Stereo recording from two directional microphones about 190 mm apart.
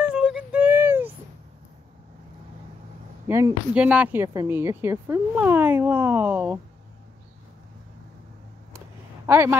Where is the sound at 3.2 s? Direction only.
10° right (ahead or behind).